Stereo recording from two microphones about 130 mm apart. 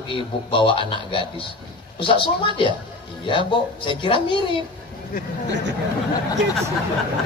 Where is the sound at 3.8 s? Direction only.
40° left (ahead or behind).